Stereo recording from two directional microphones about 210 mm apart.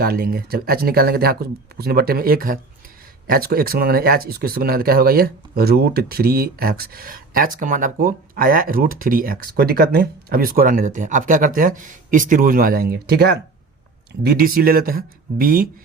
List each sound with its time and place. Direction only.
0.0 s speech: 45° right (ahead or behind)